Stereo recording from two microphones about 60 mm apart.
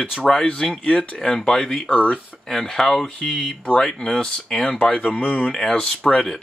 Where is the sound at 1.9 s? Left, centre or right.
Left.